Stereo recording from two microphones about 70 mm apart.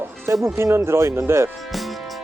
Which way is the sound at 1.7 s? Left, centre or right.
Centre.